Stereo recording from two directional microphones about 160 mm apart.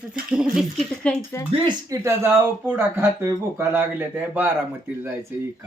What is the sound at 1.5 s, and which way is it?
Speech, 30° right (ahead or behind).